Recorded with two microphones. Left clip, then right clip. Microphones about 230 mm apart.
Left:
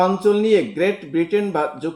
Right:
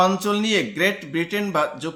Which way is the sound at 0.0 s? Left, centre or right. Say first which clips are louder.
Left 3 dB; right.